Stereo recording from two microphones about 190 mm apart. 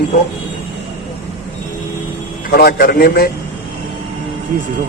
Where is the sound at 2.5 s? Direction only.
55° left (ahead or behind).